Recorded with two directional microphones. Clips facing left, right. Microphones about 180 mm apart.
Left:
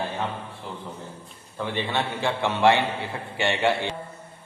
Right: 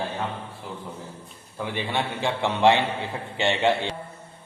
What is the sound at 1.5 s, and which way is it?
A man's voice, 10° right (ahead or behind).